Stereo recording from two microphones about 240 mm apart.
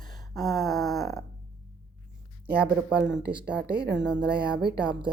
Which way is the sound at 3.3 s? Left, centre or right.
Centre.